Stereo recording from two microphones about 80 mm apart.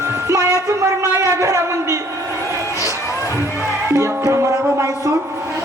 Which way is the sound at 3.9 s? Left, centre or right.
Right.